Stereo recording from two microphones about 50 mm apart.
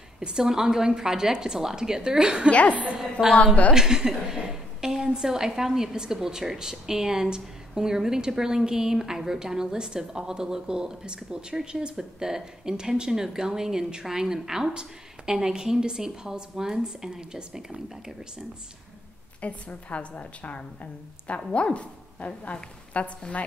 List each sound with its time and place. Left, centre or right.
0.2 s a woman's voice: centre
2.7 s a woman's voice: right
3.2 s a woman's voice: centre
19.4 s a woman's voice: left